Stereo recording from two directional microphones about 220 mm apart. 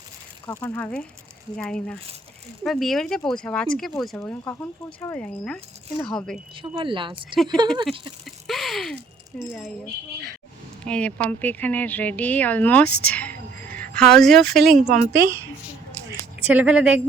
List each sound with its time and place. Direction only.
0.4 s speech: 10° left (ahead or behind)
6.6 s speech: 20° right (ahead or behind)
8.2 s a sound: centre (ahead or behind)
9.5 s speech: centre (ahead or behind)
10.8 s speech: 5° left (ahead or behind)
13.0 s music: 5° left (ahead or behind)
14.4 s a woman's voice: 50° right (ahead or behind)
16.5 s speech: 5° right (ahead or behind)